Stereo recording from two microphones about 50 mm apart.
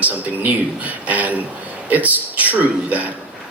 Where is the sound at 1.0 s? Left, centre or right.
Right.